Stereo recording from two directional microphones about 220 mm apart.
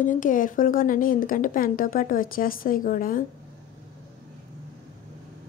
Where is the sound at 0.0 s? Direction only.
35° left (ahead or behind).